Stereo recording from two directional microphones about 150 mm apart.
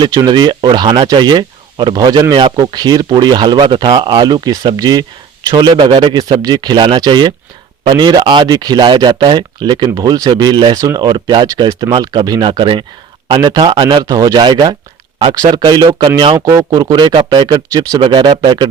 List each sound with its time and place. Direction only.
0.0 s speech: 25° right (ahead or behind)
16.5 s speech: 25° right (ahead or behind)